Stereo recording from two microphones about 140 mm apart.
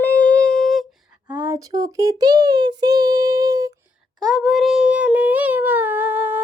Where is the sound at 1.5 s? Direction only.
25° right (ahead or behind).